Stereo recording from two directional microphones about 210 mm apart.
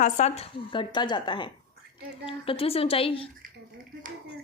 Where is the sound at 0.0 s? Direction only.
30° left (ahead or behind).